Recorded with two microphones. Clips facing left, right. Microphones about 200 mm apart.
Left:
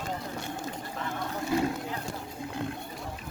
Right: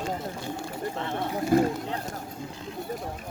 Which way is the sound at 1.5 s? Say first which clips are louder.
Right 6 dB; 50° right (ahead or behind).